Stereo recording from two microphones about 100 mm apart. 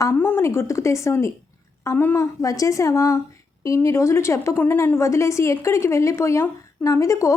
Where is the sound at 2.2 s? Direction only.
35° left (ahead or behind).